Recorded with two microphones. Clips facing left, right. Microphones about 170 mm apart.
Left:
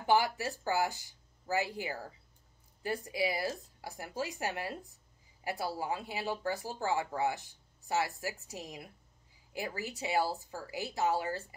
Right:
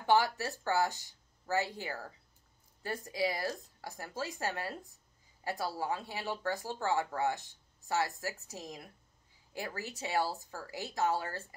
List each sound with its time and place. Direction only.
0.0 s speech: 15° left (ahead or behind)